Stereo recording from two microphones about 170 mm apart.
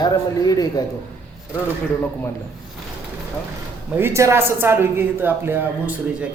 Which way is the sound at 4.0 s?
15° right (ahead or behind).